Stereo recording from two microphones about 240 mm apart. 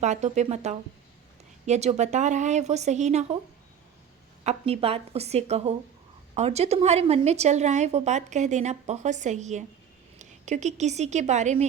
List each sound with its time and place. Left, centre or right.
0.0 s a woman's voice: right
4.4 s a woman's voice: right